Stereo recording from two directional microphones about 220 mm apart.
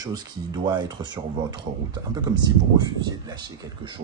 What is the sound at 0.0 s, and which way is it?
Speech, 15° right (ahead or behind).